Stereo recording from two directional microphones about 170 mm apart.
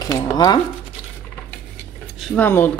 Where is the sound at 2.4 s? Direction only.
15° left (ahead or behind).